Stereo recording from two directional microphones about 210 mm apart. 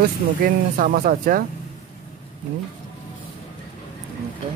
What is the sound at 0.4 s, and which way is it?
Speech, 40° right (ahead or behind).